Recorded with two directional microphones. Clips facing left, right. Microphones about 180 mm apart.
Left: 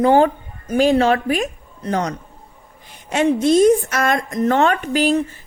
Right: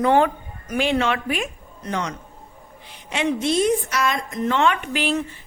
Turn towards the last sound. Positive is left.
turn(degrees=40)  # may be behind; listen again after turning